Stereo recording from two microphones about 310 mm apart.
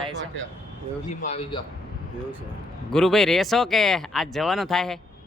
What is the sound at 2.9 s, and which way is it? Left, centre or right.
A man's voice, centre.